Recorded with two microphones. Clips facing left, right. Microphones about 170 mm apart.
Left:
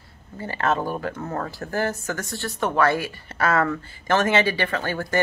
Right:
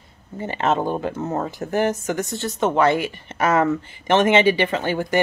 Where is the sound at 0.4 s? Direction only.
20° right (ahead or behind).